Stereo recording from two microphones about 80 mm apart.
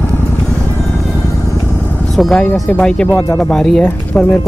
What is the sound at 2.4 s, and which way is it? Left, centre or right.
Speech, centre.